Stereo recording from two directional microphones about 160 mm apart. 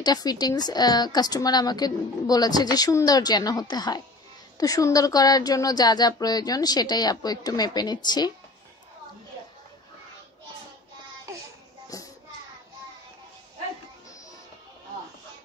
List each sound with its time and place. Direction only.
0.0 s a woman's voice: 25° left (ahead or behind)
11.9 s child singing: 20° left (ahead or behind)